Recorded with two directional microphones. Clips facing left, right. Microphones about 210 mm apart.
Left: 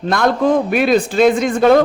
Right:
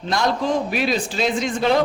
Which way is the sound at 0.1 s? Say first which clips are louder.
Left 6 dB; 55° left (ahead or behind).